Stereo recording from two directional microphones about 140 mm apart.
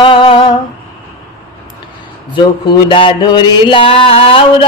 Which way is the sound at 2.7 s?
35° left (ahead or behind).